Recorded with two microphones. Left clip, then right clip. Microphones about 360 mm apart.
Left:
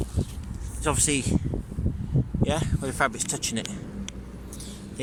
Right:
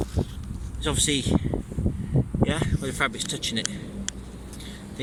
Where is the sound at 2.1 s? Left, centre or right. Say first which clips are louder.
Right 3 dB; right.